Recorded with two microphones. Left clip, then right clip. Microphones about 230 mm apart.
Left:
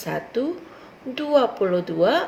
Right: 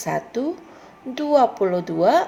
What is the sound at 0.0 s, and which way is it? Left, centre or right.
A woman's voice, right.